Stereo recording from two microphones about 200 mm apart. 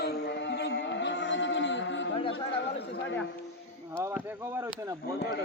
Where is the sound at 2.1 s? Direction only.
25° left (ahead or behind).